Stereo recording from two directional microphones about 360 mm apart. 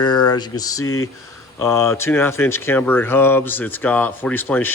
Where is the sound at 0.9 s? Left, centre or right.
Left.